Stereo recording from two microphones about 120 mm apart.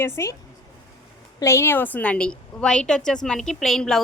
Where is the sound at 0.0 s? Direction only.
25° left (ahead or behind).